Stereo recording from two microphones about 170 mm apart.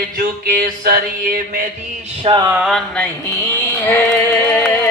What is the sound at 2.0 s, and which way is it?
Music, 30° right (ahead or behind).